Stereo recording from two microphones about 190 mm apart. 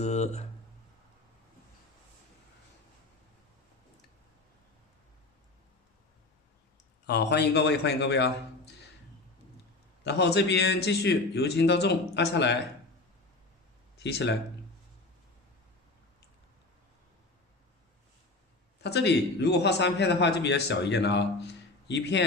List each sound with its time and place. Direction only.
0.0 s speech: 35° left (ahead or behind)
7.1 s a man's voice: 60° left (ahead or behind)
10.0 s a man's voice: 60° left (ahead or behind)
14.0 s a man's voice: 65° left (ahead or behind)
18.8 s a man's voice: 65° left (ahead or behind)